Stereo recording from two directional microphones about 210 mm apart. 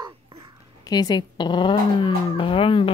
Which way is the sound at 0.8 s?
20° left (ahead or behind).